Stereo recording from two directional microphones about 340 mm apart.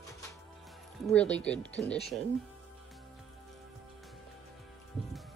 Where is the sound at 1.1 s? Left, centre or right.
Centre.